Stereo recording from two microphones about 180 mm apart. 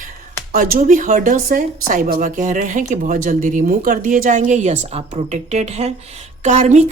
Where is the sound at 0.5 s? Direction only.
50° right (ahead or behind).